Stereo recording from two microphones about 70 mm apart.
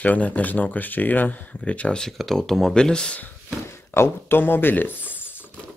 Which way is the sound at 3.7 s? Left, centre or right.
Left.